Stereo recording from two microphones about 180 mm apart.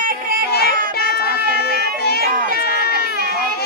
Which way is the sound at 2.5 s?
60° left (ahead or behind).